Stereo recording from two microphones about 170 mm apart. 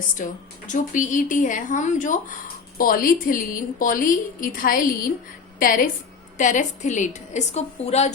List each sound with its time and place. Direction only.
0.2 s a woman's voice: 50° left (ahead or behind)